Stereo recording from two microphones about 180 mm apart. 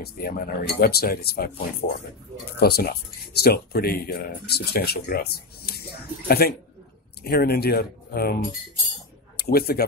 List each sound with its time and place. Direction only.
0.0 s speech: 55° left (ahead or behind)
9.4 s speech: 60° left (ahead or behind)